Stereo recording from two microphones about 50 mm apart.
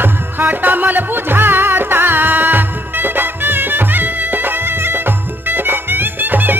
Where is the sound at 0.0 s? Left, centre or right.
Right.